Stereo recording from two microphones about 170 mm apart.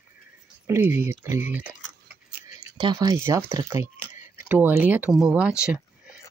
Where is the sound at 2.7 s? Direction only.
25° right (ahead or behind); by 6.1 s 5° right (ahead or behind).